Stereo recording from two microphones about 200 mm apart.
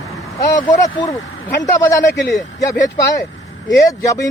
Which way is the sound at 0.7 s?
15° left (ahead or behind).